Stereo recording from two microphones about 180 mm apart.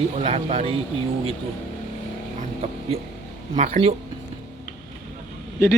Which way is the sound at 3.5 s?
45° right (ahead or behind).